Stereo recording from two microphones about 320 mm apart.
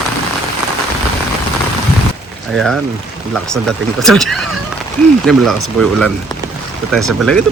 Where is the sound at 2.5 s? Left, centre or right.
Centre.